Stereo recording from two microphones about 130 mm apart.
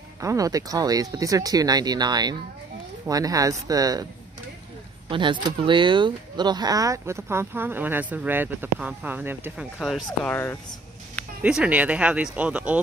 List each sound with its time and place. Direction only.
0.2 s speech: 25° right (ahead or behind)
5.1 s speech: 40° right (ahead or behind); by 9.7 s 15° right (ahead or behind)
9.8 s speech: centre (ahead or behind)
10.2 s speech: 15° left (ahead or behind)
11.4 s speech: 10° right (ahead or behind)